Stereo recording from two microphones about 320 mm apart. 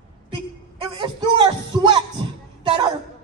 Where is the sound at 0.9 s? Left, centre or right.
Centre.